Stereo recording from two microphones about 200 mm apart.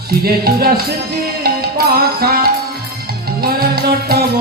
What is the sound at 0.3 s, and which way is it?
Music, 50° right (ahead or behind).